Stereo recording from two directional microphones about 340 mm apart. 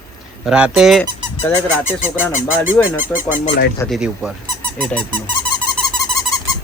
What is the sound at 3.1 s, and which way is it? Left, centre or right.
Speech, left.